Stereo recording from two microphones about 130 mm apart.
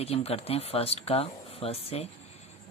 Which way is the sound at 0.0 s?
50° left (ahead or behind).